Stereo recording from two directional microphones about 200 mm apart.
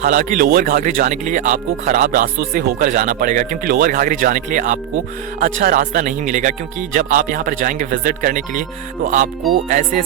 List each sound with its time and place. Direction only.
0.0 s speech: 40° right (ahead or behind)